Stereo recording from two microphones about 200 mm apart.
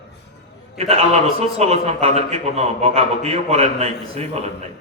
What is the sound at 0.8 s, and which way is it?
A man's voice, 30° right (ahead or behind).